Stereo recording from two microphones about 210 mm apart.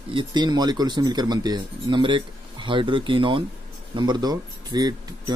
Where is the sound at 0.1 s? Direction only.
20° right (ahead or behind).